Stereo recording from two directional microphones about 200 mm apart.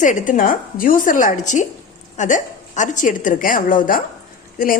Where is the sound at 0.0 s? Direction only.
40° left (ahead or behind).